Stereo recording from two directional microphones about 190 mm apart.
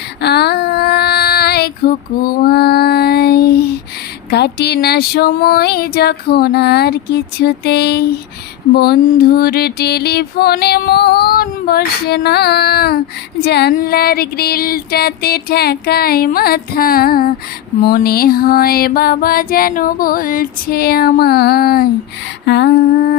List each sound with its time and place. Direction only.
0.2 s child singing: 60° left (ahead or behind)
4.3 s mantra: 60° left (ahead or behind)
13.4 s music: 60° left (ahead or behind)
22.4 s mantra: 60° left (ahead or behind)